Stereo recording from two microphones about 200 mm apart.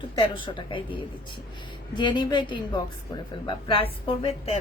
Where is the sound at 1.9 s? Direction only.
20° left (ahead or behind).